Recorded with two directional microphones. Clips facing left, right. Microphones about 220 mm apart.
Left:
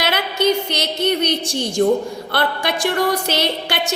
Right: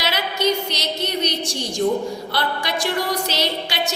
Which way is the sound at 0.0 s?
55° left (ahead or behind).